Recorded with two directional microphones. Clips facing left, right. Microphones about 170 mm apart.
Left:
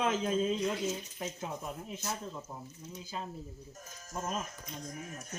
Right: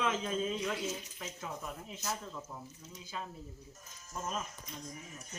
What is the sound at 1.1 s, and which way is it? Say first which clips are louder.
Speech: left 4 dB; 30° left (ahead or behind).